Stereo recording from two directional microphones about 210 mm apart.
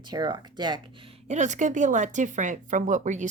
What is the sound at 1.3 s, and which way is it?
Speech, 35° right (ahead or behind).